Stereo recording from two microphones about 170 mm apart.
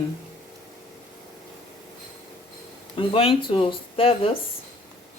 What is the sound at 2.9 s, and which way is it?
Speech, 35° left (ahead or behind).